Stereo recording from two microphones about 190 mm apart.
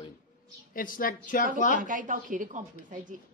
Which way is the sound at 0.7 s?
45° left (ahead or behind).